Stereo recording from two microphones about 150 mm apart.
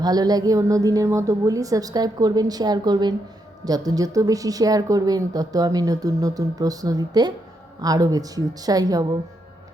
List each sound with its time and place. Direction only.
0.0 s a woman's voice: 25° right (ahead or behind)